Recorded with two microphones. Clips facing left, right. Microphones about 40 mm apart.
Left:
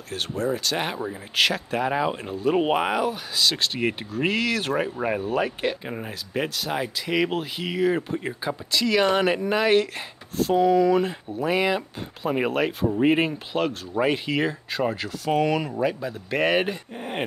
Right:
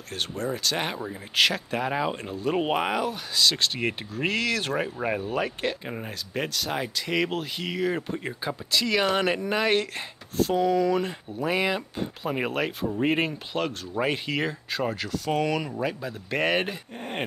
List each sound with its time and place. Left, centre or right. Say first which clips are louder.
0.1 s speech: left 4 dB; centre